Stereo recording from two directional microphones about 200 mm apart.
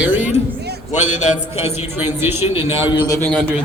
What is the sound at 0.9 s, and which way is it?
Speech, 35° left (ahead or behind).